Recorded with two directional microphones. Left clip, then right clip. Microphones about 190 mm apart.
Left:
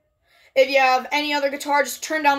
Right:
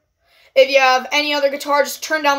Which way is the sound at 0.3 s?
5° left (ahead or behind).